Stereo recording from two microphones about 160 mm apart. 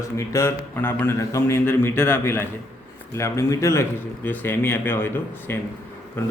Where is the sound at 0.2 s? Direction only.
15° left (ahead or behind).